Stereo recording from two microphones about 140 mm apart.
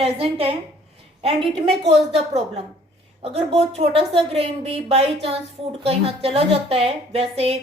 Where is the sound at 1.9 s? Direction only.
50° right (ahead or behind).